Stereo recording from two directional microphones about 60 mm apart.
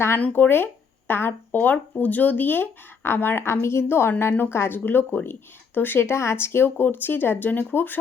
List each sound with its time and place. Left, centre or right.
0.2 s a woman's voice: left